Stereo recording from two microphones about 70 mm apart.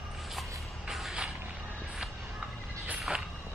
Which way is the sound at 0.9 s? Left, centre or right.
Centre.